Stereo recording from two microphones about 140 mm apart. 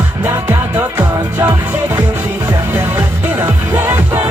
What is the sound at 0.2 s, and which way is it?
Music, 15° right (ahead or behind).